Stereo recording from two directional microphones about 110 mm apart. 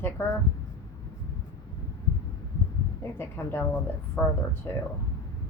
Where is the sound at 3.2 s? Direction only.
20° left (ahead or behind).